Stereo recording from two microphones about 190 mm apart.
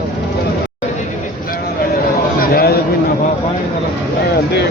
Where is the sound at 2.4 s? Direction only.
50° left (ahead or behind).